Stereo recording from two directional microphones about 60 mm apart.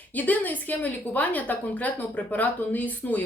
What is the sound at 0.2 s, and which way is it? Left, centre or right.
A woman's voice, left.